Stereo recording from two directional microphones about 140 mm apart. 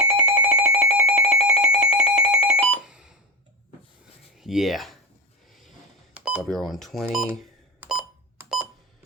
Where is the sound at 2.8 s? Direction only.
5° right (ahead or behind).